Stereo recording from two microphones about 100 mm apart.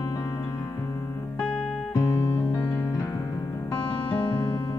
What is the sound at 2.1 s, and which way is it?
Music, 20° left (ahead or behind).